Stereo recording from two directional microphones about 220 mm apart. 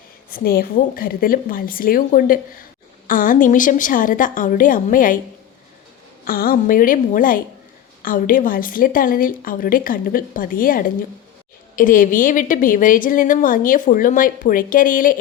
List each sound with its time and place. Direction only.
0.3 s a woman's voice: 40° left (ahead or behind)
6.2 s a woman's voice: 40° left (ahead or behind)